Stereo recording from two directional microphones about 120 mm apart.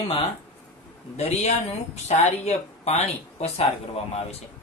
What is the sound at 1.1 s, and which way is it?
Speech, 60° left (ahead or behind).